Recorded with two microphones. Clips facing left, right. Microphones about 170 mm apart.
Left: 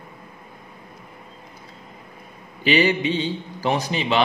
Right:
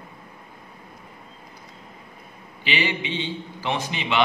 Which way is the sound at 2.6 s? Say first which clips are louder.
Left 8 dB; 40° left (ahead or behind).